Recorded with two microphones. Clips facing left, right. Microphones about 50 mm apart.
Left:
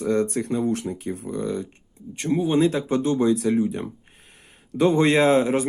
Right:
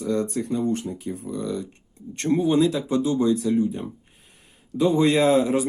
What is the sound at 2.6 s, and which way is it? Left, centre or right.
Speech, left.